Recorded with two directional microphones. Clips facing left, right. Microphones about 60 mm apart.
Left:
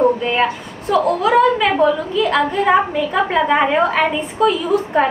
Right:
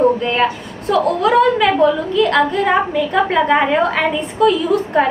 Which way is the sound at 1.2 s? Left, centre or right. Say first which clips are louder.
Right 2 dB; centre.